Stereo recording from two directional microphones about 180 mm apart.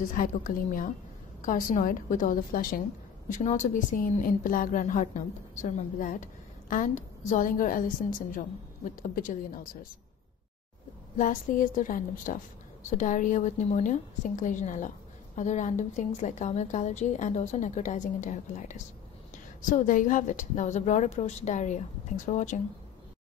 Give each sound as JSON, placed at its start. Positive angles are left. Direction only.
{"t": 0.1, "sound": "a woman's voice", "side_deg": 50}
{"t": 9.0, "sound": "a woman's voice", "side_deg": 50}
{"t": 11.1, "sound": "a woman's voice", "side_deg": 45}